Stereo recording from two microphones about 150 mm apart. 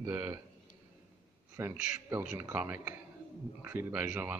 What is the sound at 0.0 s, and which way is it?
Speech, 15° right (ahead or behind).